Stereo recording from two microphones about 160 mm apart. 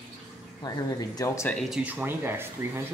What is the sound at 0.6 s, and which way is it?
Speech, 25° left (ahead or behind).